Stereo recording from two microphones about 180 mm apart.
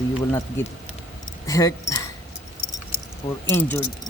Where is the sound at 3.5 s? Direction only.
10° left (ahead or behind).